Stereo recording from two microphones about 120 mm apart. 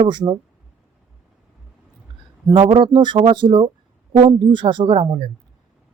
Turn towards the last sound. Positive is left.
turn(degrees=-45)  # may be behind; listen again after turning